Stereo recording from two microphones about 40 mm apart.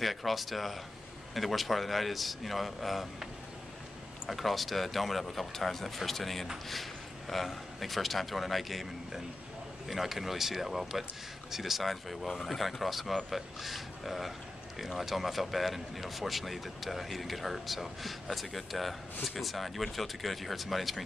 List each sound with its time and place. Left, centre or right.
0.0 s speech: centre
4.3 s a man's voice: centre